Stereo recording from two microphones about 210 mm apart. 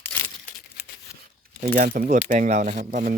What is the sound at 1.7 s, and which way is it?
Speech, 40° right (ahead or behind).